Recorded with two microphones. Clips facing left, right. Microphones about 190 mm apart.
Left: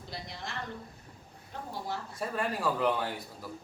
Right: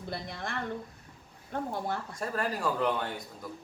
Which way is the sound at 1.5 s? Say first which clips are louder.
Right 8 dB; 55° right (ahead or behind).